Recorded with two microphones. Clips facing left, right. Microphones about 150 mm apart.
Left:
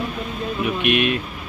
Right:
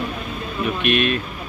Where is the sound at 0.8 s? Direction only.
15° left (ahead or behind).